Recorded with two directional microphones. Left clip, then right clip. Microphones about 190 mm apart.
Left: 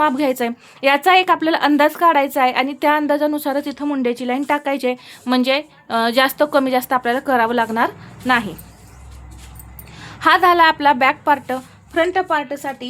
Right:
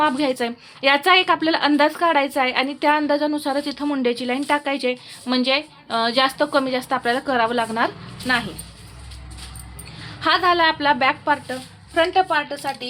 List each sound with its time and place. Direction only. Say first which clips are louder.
0.0 s a woman's voice: left 3 dB; 25° left (ahead or behind)
10.2 s a woman's voice: left 5 dB; 35° left (ahead or behind)
11.9 s a woman's voice: left 1 dB; 45° left (ahead or behind)